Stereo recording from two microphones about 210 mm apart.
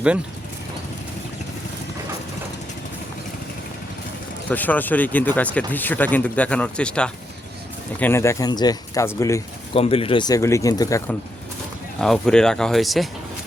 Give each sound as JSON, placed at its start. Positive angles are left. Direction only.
{"t": 4.4, "sound": "speech", "side_deg": 10}
{"t": 9.7, "sound": "speech", "side_deg": 25}
{"t": 11.9, "sound": "speech", "side_deg": 0}